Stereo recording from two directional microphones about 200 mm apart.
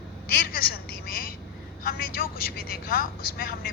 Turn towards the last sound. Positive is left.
turn(degrees=45)  # may be behind; listen again after turning